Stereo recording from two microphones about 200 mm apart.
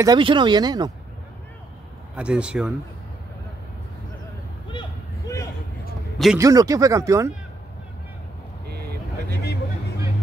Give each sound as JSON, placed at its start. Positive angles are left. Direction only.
{"t": 0.0, "sound": "speech", "side_deg": -20}
{"t": 2.1, "sound": "speech", "side_deg": -5}
{"t": 4.6, "sound": "a sound", "side_deg": 20}
{"t": 6.3, "sound": "speech", "side_deg": -15}
{"t": 8.6, "sound": "vehicle", "side_deg": -55}